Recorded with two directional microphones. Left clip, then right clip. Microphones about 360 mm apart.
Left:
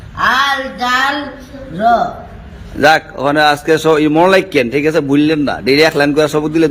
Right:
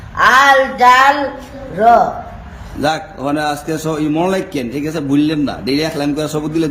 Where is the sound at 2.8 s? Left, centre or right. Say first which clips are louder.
Left 7 dB; centre.